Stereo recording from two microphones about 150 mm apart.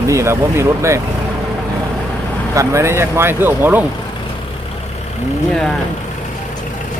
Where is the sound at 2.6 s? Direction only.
20° right (ahead or behind).